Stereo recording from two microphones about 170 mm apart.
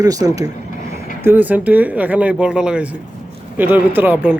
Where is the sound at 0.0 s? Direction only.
20° right (ahead or behind).